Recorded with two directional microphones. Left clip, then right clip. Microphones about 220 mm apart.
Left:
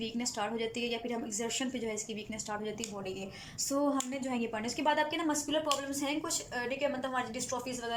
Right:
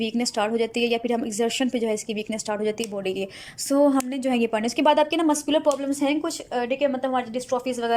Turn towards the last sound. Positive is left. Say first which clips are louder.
# right 13 dB
turn(degrees=-45)  # may be behind; listen again after turning